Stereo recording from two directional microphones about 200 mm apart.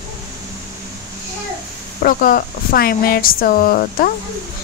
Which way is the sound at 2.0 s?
45° left (ahead or behind).